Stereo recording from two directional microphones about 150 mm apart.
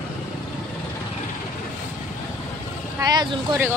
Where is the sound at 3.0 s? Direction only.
30° right (ahead or behind).